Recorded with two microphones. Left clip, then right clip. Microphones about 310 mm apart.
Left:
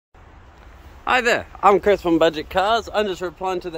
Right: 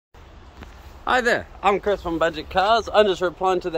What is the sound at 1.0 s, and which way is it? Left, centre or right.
Speech, centre.